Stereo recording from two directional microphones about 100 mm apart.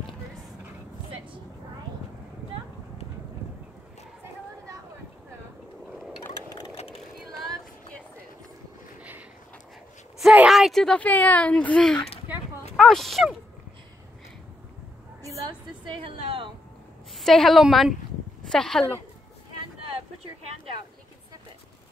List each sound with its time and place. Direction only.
6.7 s vehicle: 75° left (ahead or behind)
10.3 s speech: 5° right (ahead or behind)
15.8 s a woman's voice: 60° right (ahead or behind)
17.2 s a woman's voice: 5° left (ahead or behind)